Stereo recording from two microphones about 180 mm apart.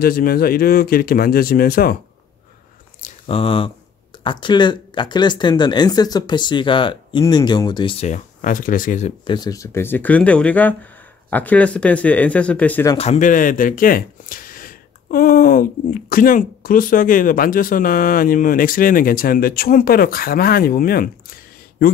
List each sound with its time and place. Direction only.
0.0 s speech: 55° left (ahead or behind)
3.0 s a sound: 30° left (ahead or behind)
4.2 s speech: 25° left (ahead or behind)
8.1 s speech: 45° left (ahead or behind)
9.2 s speech: 25° left (ahead or behind)
12.9 s speech: 35° left (ahead or behind); by 21.1 s 55° left (ahead or behind)